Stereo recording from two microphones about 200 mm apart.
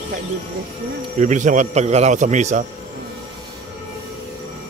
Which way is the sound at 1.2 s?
40° right (ahead or behind).